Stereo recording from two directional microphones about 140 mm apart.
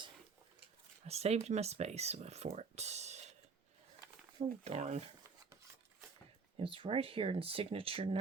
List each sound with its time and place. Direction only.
1.0 s speech: 50° right (ahead or behind)
4.6 s speech: 55° right (ahead or behind)
6.6 s speech: 40° right (ahead or behind)